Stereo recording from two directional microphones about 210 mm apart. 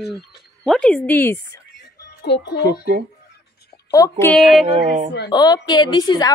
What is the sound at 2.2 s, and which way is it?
Speech, 55° left (ahead or behind).